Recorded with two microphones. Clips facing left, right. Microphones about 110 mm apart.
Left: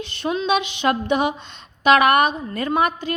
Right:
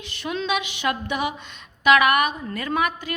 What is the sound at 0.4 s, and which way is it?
A woman's voice, 30° left (ahead or behind).